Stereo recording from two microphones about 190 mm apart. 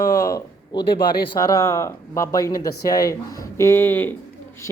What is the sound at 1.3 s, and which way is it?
Speech, 20° left (ahead or behind).